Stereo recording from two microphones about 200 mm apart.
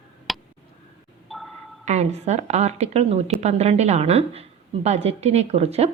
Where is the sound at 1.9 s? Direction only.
35° right (ahead or behind).